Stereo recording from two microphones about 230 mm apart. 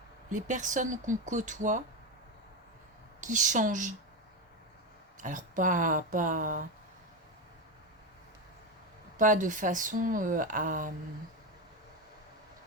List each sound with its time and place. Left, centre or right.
0.3 s speech: right
3.2 s speech: right
5.2 s speech: right
9.1 s speech: right